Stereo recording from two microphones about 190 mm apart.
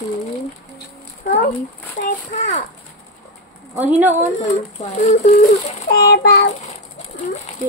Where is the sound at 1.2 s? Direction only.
50° left (ahead or behind).